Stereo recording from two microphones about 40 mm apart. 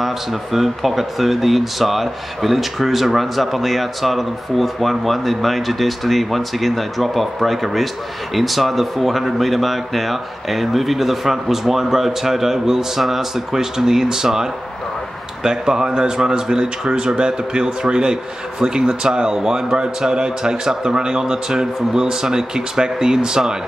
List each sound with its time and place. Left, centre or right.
0.0 s speech: centre